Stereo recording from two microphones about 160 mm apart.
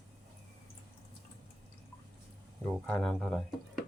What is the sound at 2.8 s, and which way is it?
Speech, 5° left (ahead or behind).